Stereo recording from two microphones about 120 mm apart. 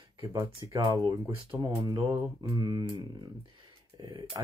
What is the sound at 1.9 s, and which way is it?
Speech, 40° right (ahead or behind).